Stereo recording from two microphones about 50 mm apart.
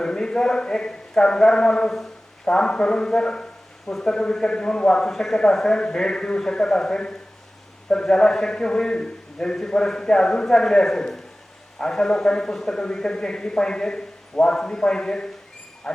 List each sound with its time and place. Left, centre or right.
0.0 s a man's voice: centre